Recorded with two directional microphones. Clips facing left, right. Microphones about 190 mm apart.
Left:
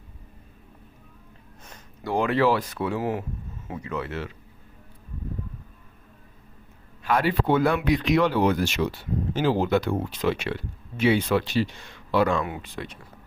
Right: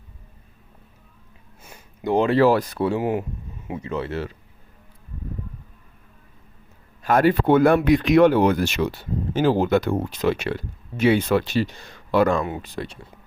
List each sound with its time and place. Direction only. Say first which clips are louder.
1.6 s a sound: right 4 dB; 10° right (ahead or behind)
2.0 s speech: right 5 dB; 20° right (ahead or behind)
2.3 s speech: right 4 dB; 40° right (ahead or behind)
3.0 s speech: right 4 dB; 20° right (ahead or behind)
7.0 s speech: right 5 dB; 45° right (ahead or behind)